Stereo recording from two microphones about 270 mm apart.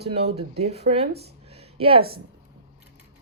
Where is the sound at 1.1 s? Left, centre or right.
Right.